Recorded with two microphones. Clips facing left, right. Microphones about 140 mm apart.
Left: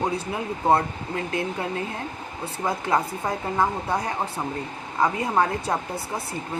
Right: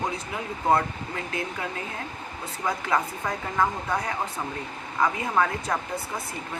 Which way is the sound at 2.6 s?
30° left (ahead or behind).